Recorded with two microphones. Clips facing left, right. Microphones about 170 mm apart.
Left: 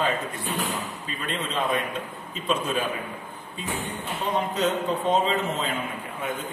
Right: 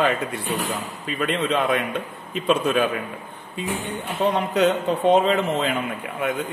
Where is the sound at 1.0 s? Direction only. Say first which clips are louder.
Right 13 dB; 70° right (ahead or behind).